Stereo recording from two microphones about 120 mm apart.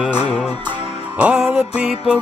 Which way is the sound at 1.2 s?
10° right (ahead or behind).